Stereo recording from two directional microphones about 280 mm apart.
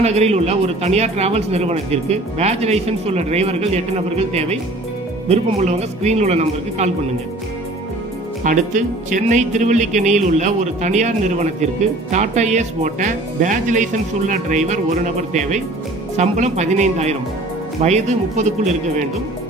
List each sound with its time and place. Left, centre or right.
0.0 s speech: right
8.5 s speech: right